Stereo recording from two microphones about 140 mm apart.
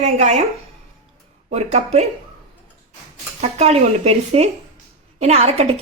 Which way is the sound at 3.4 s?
50° right (ahead or behind).